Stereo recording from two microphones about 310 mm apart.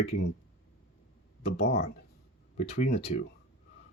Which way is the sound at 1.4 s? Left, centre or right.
Left.